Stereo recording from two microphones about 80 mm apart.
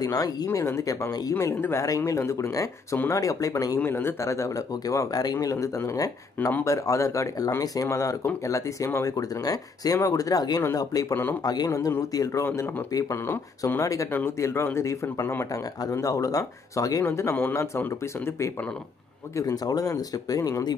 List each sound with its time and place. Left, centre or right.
0.0 s speech: left
3.8 s a man's voice: left
12.9 s speech: left
14.4 s speech: left
15.5 s speech: left
17.0 s speech: left
19.3 s speech: left